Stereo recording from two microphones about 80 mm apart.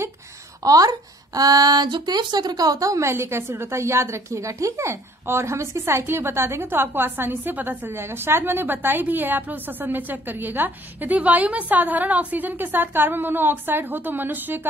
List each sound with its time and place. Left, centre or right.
0.7 s speech: right